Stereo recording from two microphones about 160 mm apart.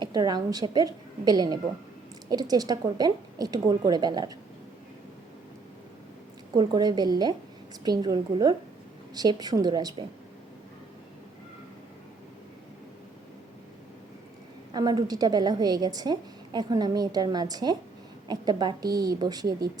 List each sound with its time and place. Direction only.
0.0 s a woman's voice: 25° right (ahead or behind)
6.6 s a woman's voice: 25° right (ahead or behind)
14.7 s a woman's voice: 25° right (ahead or behind)